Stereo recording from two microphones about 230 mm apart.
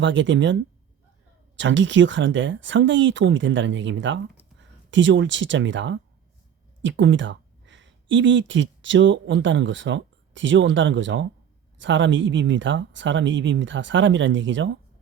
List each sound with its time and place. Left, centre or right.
0.0 s speech: right